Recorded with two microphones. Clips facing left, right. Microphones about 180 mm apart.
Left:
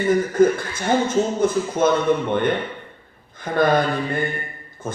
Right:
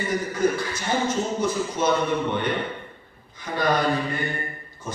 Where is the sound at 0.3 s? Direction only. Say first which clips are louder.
Left 6 dB; 50° left (ahead or behind).